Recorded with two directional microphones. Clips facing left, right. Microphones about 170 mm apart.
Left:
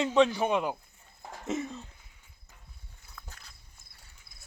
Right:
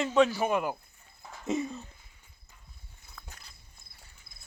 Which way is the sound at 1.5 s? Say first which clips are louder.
Right 2 dB; 10° right (ahead or behind).